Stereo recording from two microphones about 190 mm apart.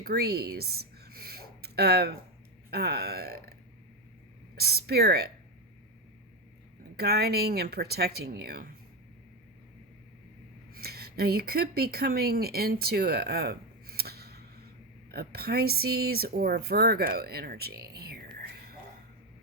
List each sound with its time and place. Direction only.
0.0 s a sound: 55° right (ahead or behind)
2.6 s speech: 55° right (ahead or behind)
4.5 s speech: 55° right (ahead or behind)
6.9 s speech: 55° right (ahead or behind)
10.8 s speech: 55° right (ahead or behind)